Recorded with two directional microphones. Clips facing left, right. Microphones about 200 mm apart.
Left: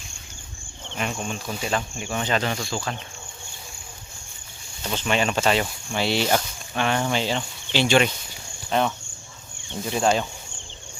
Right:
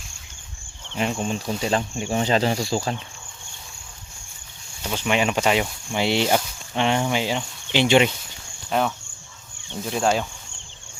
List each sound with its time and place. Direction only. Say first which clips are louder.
0.9 s speech: right 4 dB; 25° right (ahead or behind)
4.8 s speech: right 1 dB; 10° right (ahead or behind)
8.7 s speech: even; 5° right (ahead or behind)